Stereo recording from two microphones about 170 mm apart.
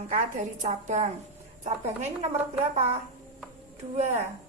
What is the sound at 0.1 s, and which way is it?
A woman's voice, 45° right (ahead or behind).